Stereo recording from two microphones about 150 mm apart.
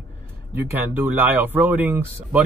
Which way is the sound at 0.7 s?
10° right (ahead or behind).